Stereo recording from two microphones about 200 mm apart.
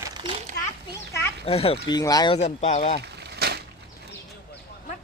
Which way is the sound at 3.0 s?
55° right (ahead or behind).